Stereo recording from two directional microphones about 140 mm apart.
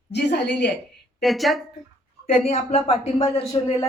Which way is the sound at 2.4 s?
50° left (ahead or behind).